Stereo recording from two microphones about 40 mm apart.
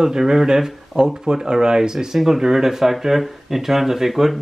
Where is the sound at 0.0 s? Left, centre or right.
Centre.